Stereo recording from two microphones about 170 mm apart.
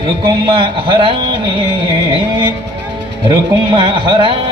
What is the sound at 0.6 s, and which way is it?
Music, 30° right (ahead or behind).